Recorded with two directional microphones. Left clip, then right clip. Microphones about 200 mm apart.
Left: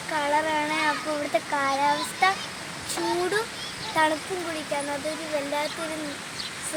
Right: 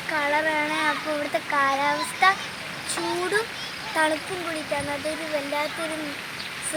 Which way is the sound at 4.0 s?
10° left (ahead or behind).